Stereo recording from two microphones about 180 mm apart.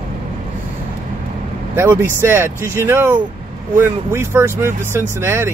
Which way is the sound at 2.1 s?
15° right (ahead or behind).